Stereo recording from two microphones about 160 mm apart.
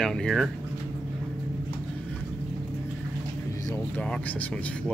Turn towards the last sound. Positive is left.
turn(degrees=10)  # may be behind; listen again after turning